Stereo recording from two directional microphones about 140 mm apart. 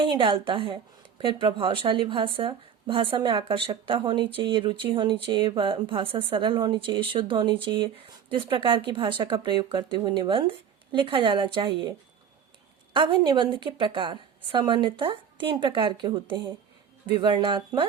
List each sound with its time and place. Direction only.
0.0 s speech: 40° right (ahead or behind)